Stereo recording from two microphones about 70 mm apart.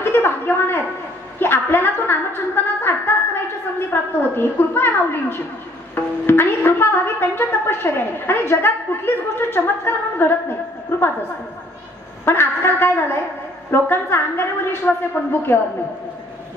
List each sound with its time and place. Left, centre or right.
0.0 s a sound: left
3.9 s a woman's voice: left
12.3 s a woman's voice: left